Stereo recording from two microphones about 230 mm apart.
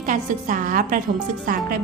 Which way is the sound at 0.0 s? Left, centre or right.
Right.